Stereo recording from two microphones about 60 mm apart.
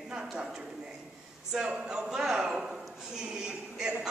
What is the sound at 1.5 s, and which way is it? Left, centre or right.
Speech, centre.